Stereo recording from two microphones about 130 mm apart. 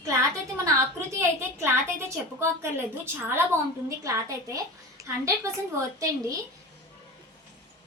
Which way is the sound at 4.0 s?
25° right (ahead or behind).